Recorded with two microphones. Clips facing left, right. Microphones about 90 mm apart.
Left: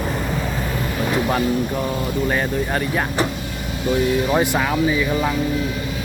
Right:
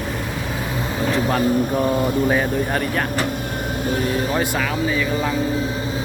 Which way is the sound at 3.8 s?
45° right (ahead or behind).